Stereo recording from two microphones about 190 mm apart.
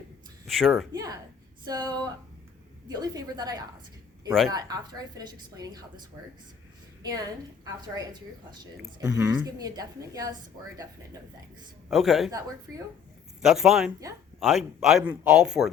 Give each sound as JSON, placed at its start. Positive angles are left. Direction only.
{"t": 0.4, "sound": "a woman's voice", "side_deg": 0}
{"t": 0.9, "sound": "a sound", "side_deg": -20}
{"t": 1.6, "sound": "a woman's voice", "side_deg": -20}
{"t": 7.6, "sound": "a woman's voice", "side_deg": -20}
{"t": 9.0, "sound": "a man's voice", "side_deg": -5}
{"t": 9.6, "sound": "a woman's voice", "side_deg": -20}
{"t": 11.9, "sound": "a man's voice", "side_deg": 0}
{"t": 13.4, "sound": "a man's voice", "side_deg": 0}